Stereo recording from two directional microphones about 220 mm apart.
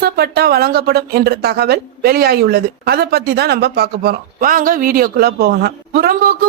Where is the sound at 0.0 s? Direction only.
45° right (ahead or behind).